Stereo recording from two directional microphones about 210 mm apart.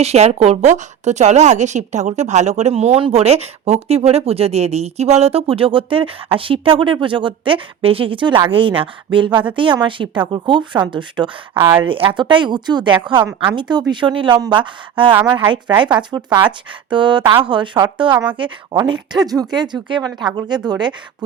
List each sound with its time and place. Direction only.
0.0 s a woman's voice: 30° right (ahead or behind)
11.8 s a woman's voice: 25° right (ahead or behind)
15.3 s a woman's voice: 10° right (ahead or behind)